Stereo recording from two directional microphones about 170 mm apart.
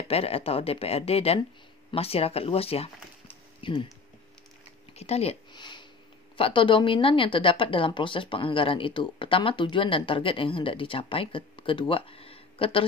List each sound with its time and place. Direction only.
0.1 s a woman's voice: 35° left (ahead or behind)
4.9 s a sound: 35° left (ahead or behind)
6.3 s a woman's voice: 30° left (ahead or behind)